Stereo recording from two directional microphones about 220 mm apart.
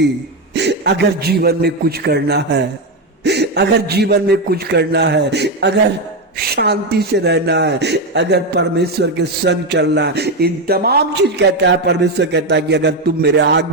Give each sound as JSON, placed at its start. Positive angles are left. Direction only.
{"t": 0.5, "sound": "speech", "side_deg": -50}